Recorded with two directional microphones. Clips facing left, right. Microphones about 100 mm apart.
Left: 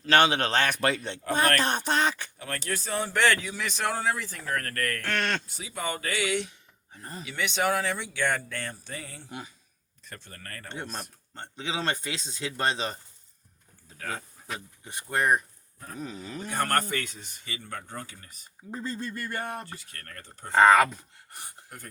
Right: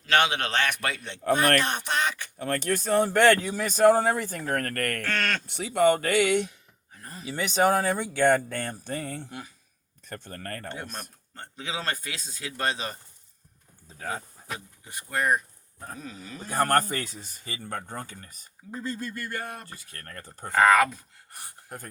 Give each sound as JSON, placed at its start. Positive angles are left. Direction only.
{"t": 0.0, "sound": "a man's voice", "side_deg": 35}
{"t": 2.4, "sound": "a man's voice", "side_deg": -50}
{"t": 5.0, "sound": "speech", "side_deg": 20}
{"t": 5.5, "sound": "speech", "side_deg": -65}
{"t": 7.0, "sound": "speech", "side_deg": 25}
{"t": 7.3, "sound": "a man's voice", "side_deg": -40}
{"t": 11.3, "sound": "speech", "side_deg": 25}
{"t": 14.0, "sound": "speech", "side_deg": -30}
{"t": 14.8, "sound": "speech", "side_deg": 25}
{"t": 16.5, "sound": "speech", "side_deg": -40}
{"t": 18.7, "sound": "speech", "side_deg": 25}
{"t": 19.6, "sound": "speech", "side_deg": -35}
{"t": 20.5, "sound": "speech", "side_deg": 25}